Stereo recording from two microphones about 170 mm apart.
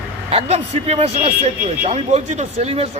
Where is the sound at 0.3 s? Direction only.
35° right (ahead or behind).